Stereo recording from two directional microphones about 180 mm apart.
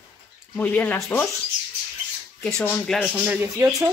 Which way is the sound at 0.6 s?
10° left (ahead or behind).